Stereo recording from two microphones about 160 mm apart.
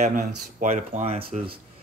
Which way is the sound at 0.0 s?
50° right (ahead or behind).